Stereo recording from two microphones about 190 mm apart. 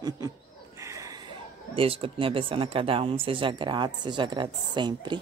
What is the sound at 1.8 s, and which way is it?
Speech, 30° right (ahead or behind).